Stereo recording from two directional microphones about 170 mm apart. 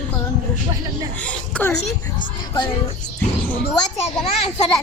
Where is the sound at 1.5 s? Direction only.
5° left (ahead or behind).